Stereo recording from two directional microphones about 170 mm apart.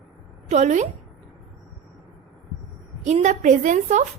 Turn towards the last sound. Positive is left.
turn(degrees=-45)  # may be behind; listen again after turning